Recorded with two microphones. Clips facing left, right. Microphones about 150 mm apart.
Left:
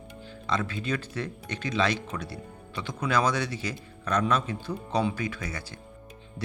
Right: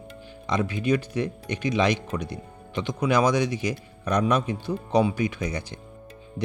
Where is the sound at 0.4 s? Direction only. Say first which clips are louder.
Right 5 dB; 15° right (ahead or behind).